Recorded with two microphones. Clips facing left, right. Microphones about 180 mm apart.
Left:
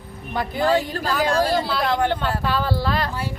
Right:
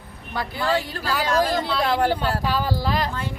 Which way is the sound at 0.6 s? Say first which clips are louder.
Left 4 dB; 40° left (ahead or behind).